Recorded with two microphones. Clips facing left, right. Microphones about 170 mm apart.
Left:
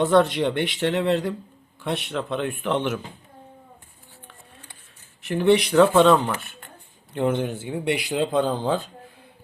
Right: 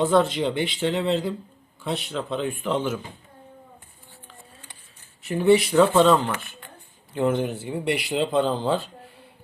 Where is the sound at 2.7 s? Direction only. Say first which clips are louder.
Left 1 dB; 65° left (ahead or behind).